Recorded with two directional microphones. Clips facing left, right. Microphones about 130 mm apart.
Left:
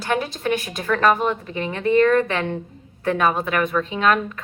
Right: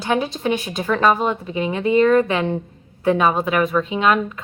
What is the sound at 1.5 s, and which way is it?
Speech, 10° right (ahead or behind).